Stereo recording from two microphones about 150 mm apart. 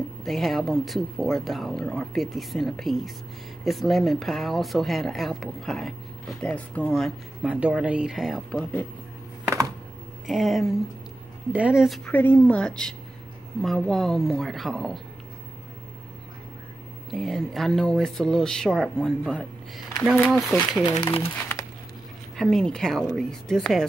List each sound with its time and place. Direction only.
0.2 s speech: centre (ahead or behind)
7.4 s speech: 5° right (ahead or behind)
9.4 s a sound: 15° right (ahead or behind)
10.2 s speech: centre (ahead or behind)
12.1 s speech: 15° left (ahead or behind)
17.1 s speech: centre (ahead or behind)
21.2 s crumpling: 15° left (ahead or behind)
22.4 s speech: 5° left (ahead or behind)